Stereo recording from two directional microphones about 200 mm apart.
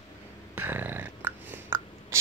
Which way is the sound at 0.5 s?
10° right (ahead or behind).